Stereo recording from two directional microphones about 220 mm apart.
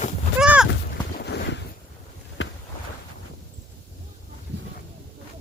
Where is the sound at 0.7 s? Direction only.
50° left (ahead or behind).